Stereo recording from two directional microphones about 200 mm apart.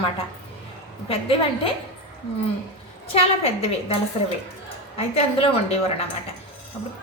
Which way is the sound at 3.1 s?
30° left (ahead or behind).